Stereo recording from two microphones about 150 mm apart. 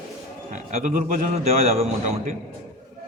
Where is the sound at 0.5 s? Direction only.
50° right (ahead or behind).